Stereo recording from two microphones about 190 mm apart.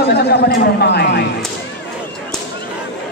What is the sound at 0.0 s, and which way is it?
Speech, 60° left (ahead or behind).